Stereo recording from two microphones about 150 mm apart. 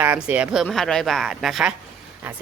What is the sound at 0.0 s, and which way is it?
A woman's voice, 10° right (ahead or behind).